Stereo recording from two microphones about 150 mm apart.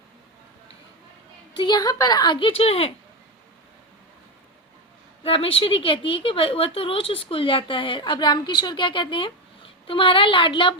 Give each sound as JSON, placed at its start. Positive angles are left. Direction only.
{"t": 1.5, "sound": "a woman's voice", "side_deg": 30}
{"t": 5.2, "sound": "a woman's voice", "side_deg": 40}